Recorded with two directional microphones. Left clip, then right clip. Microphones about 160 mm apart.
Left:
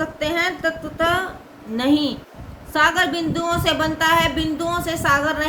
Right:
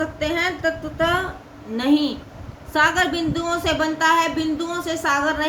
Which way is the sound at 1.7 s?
25° left (ahead or behind).